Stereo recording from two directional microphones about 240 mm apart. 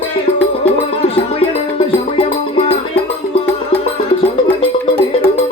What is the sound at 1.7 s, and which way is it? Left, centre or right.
Music, left.